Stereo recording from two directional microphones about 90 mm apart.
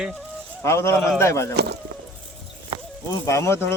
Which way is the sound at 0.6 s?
30° left (ahead or behind).